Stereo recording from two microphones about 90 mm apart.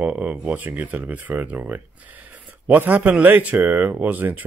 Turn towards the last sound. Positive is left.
turn(degrees=-20)  # may be behind; listen again after turning